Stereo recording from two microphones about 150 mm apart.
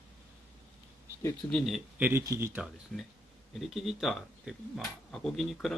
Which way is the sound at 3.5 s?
Centre (ahead or behind).